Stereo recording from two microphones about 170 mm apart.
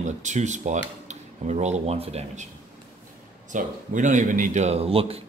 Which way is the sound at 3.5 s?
50° right (ahead or behind).